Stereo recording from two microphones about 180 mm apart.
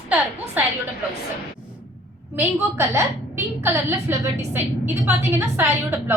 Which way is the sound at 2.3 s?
10° right (ahead or behind).